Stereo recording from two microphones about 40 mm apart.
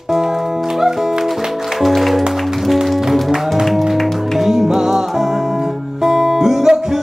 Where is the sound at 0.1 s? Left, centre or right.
Centre.